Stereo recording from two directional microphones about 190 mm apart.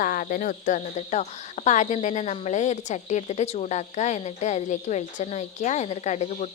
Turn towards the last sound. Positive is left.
turn(degrees=35)  # may be behind; listen again after turning